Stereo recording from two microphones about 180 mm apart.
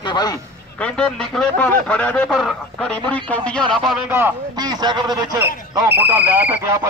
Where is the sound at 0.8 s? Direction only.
5° left (ahead or behind).